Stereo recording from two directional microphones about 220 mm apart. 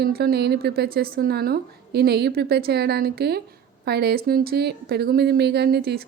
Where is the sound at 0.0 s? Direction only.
45° right (ahead or behind).